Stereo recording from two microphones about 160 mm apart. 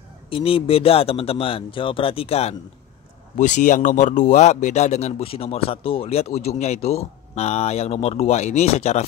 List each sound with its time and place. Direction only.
0.3 s a man's voice: 35° left (ahead or behind)
3.3 s speech: 50° left (ahead or behind)